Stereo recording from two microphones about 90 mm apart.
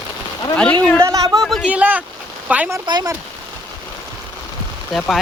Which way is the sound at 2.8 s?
55° right (ahead or behind).